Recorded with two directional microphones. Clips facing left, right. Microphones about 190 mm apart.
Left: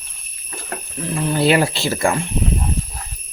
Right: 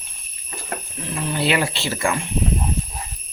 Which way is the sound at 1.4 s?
40° left (ahead or behind).